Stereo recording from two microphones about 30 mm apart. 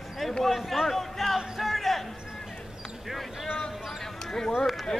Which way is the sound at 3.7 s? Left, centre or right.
Centre.